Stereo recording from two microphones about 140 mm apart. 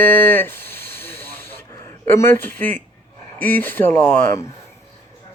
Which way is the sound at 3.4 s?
15° left (ahead or behind).